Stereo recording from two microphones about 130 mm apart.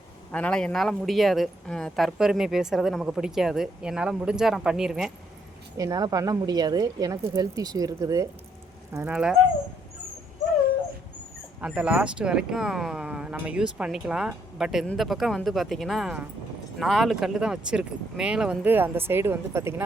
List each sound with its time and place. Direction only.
0.3 s speech: 10° left (ahead or behind)
5.7 s speech: 30° right (ahead or behind)
9.1 s speech: 10° right (ahead or behind)
11.6 s speech: 10° right (ahead or behind)